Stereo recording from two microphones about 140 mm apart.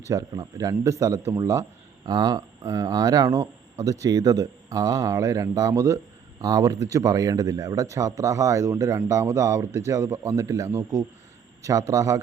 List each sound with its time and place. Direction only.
0.1 s speech: 25° right (ahead or behind)